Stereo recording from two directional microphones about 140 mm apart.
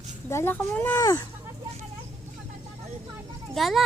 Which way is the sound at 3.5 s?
Centre (ahead or behind).